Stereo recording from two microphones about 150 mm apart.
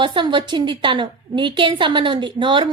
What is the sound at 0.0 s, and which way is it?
A woman's voice, 30° right (ahead or behind).